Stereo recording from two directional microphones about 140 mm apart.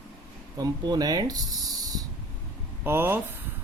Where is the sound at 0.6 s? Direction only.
30° right (ahead or behind).